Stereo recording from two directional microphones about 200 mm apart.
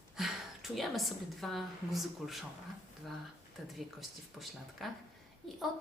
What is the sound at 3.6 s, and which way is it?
Speech, centre (ahead or behind).